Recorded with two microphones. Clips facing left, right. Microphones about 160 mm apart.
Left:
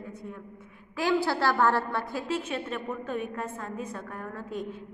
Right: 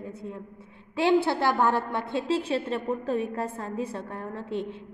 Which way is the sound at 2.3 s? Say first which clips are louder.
Right 5 dB; 30° right (ahead or behind).